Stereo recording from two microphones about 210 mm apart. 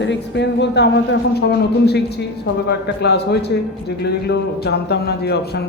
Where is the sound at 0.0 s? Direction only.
55° left (ahead or behind).